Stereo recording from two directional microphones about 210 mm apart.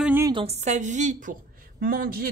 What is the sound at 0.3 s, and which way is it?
Speech, 25° right (ahead or behind).